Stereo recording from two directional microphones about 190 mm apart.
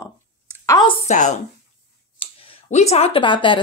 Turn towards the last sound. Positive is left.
turn(degrees=25)  # may be behind; listen again after turning